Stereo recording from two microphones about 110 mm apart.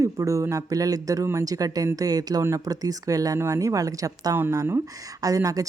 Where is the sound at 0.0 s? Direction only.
30° right (ahead or behind).